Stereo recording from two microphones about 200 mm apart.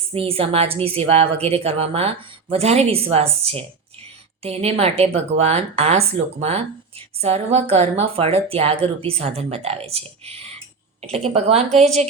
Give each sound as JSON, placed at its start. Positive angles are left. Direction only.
{"t": 0.1, "sound": "a woman's voice", "side_deg": -30}